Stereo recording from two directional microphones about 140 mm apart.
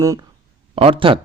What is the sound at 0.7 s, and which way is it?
Speech, 40° right (ahead or behind).